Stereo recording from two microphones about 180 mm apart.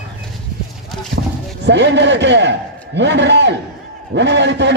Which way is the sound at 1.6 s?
75° right (ahead or behind).